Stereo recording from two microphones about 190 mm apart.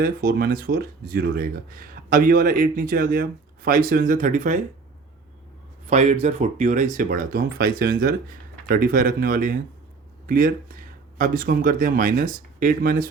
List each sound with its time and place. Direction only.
0.0 s speech: 50° right (ahead or behind)
5.9 s speech: 35° right (ahead or behind)